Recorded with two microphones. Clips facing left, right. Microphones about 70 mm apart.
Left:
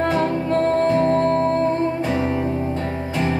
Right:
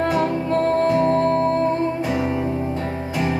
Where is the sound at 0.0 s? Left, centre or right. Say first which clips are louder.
Even; left.